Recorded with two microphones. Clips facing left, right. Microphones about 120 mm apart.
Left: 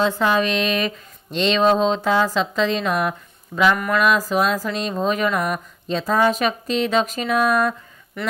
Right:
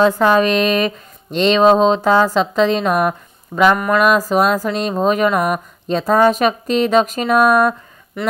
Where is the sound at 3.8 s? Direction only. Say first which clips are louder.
Right 5 dB; 45° right (ahead or behind).